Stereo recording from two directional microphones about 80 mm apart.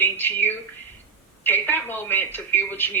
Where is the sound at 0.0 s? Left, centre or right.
Left.